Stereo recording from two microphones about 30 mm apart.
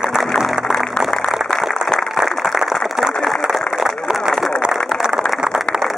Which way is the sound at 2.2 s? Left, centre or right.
Centre.